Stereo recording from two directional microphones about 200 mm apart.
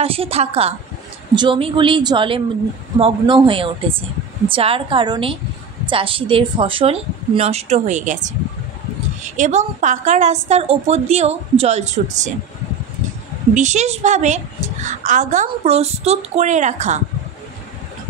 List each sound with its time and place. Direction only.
0.0 s a woman's voice: 30° right (ahead or behind)
13.6 s a woman's voice: 35° right (ahead or behind)